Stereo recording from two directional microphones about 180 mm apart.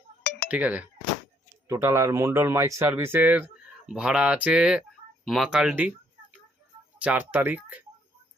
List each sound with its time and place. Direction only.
0.2 s a sound: 60° left (ahead or behind)
0.4 s a man's voice: 10° right (ahead or behind)
7.0 s a man's voice: 10° right (ahead or behind)